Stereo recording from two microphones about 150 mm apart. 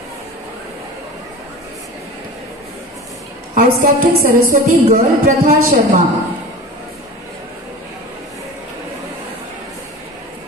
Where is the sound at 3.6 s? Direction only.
70° right (ahead or behind).